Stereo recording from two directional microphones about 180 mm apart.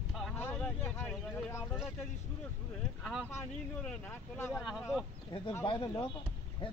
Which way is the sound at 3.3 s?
10° left (ahead or behind).